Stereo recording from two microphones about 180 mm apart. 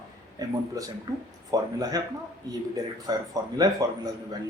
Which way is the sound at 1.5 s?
20° right (ahead or behind).